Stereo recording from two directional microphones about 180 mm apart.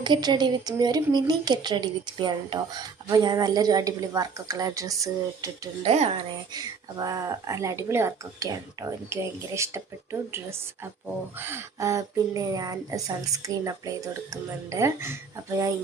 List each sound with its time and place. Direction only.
0.0 s speech: 25° right (ahead or behind)
5.8 s speech: 35° right (ahead or behind)
6.5 s speech: 20° right (ahead or behind)